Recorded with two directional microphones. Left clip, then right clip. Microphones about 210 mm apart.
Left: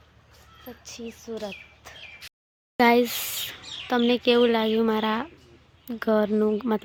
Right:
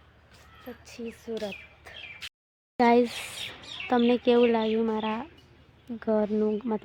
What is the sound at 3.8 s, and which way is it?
Speech, 5° right (ahead or behind).